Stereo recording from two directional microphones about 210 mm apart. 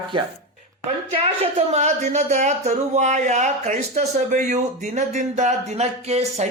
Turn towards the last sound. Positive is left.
turn(degrees=-30)  # may be behind; listen again after turning